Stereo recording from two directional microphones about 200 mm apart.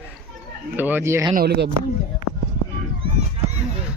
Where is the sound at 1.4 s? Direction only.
55° right (ahead or behind).